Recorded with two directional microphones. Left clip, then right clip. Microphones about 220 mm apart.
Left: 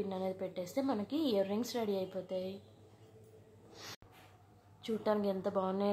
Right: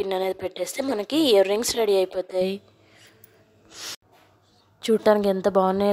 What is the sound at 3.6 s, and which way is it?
Snort, 20° right (ahead or behind).